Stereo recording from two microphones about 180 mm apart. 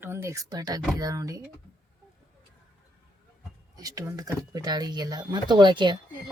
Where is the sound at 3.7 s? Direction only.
20° right (ahead or behind).